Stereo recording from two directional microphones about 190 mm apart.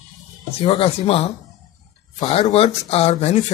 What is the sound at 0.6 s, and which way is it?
Speech, 30° left (ahead or behind).